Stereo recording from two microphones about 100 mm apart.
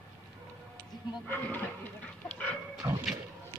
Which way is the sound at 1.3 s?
20° left (ahead or behind).